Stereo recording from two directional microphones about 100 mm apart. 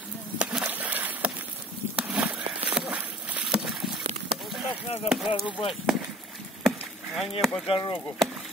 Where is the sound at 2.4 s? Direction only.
65° right (ahead or behind).